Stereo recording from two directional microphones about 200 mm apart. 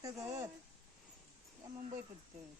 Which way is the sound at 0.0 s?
15° right (ahead or behind).